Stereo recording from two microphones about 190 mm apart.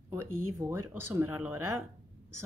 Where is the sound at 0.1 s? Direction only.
15° right (ahead or behind).